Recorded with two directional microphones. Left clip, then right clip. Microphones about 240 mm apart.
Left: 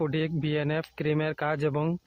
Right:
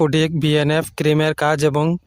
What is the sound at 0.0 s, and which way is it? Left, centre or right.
Speech, right.